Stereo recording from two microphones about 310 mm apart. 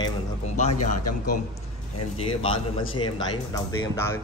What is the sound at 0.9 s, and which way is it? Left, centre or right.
Speech, left.